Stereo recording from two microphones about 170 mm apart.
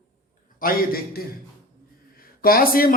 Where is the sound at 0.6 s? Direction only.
60° left (ahead or behind).